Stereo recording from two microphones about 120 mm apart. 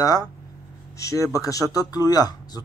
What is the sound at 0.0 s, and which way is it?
Speech, 30° left (ahead or behind).